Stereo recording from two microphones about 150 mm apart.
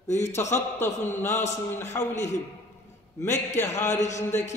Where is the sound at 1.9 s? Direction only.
20° left (ahead or behind).